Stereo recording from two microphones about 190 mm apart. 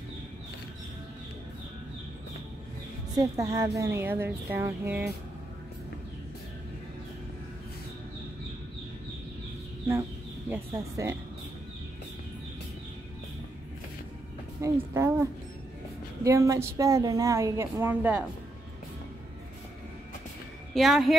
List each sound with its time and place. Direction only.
3.2 s a woman's voice: 15° right (ahead or behind)
10.5 s speech: 15° right (ahead or behind)
14.6 s a woman's voice: 15° right (ahead or behind)
16.3 s a woman's voice: 15° right (ahead or behind)
20.7 s speech: centre (ahead or behind)